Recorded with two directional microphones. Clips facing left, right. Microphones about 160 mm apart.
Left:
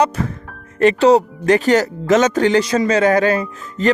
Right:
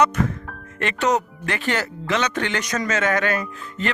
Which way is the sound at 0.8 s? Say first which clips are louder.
Left 10 dB; 35° left (ahead or behind).